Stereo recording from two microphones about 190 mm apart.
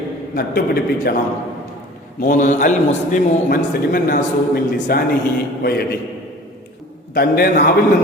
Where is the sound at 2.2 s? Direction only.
40° left (ahead or behind).